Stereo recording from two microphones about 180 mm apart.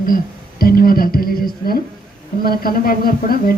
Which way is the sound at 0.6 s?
55° left (ahead or behind).